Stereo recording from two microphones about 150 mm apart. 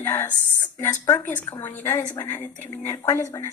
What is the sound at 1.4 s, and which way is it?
Speech, 25° left (ahead or behind).